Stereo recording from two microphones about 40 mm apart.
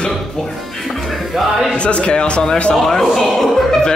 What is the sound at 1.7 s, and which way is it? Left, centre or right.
Speech, left.